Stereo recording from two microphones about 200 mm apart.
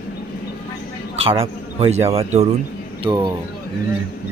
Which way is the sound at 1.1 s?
30° right (ahead or behind).